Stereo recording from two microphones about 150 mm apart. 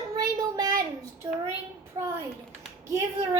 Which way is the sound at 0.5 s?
25° right (ahead or behind).